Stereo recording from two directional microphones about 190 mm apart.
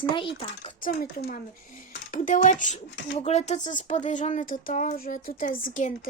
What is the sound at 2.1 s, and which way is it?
Speech, 40° left (ahead or behind).